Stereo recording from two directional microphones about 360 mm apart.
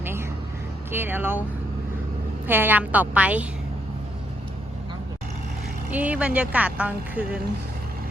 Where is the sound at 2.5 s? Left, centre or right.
Centre.